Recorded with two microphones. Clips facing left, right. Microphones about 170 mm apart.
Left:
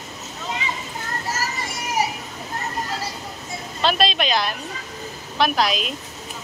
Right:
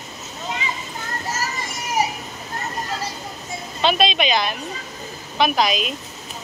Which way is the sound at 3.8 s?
Centre (ahead or behind).